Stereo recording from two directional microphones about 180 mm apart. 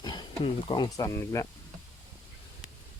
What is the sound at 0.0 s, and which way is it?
Speech, 25° left (ahead or behind).